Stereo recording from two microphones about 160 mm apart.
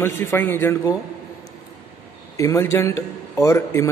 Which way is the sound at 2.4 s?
20° left (ahead or behind).